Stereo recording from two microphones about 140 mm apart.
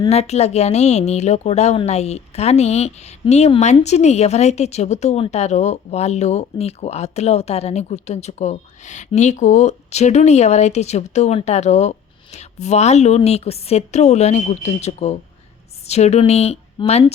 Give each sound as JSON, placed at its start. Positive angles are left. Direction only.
{"t": 0.1, "sound": "a woman's voice", "side_deg": 50}